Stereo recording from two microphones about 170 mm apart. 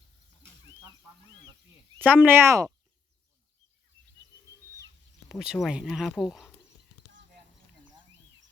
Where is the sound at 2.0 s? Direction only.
10° right (ahead or behind).